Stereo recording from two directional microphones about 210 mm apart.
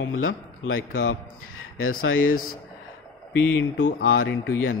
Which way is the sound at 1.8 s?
80° left.